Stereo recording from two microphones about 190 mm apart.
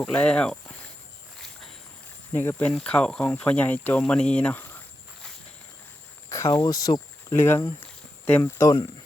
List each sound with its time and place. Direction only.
0.0 s speech: 5° left (ahead or behind)
2.3 s speech: 10° left (ahead or behind)
6.3 s speech: 15° left (ahead or behind)